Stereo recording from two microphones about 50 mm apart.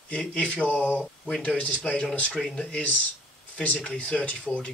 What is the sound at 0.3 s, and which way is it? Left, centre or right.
Speech, left.